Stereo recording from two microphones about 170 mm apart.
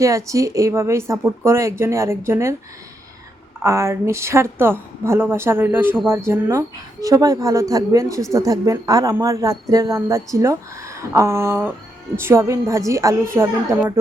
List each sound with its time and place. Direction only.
0.0 s speech: 20° right (ahead or behind)
3.6 s a woman's voice: 15° right (ahead or behind)